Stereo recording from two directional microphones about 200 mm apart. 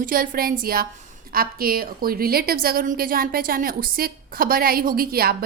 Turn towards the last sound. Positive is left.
turn(degrees=-50)  # may be behind; listen again after turning